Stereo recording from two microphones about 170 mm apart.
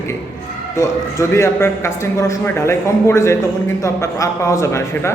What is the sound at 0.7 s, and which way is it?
A man's voice, 15° left (ahead or behind).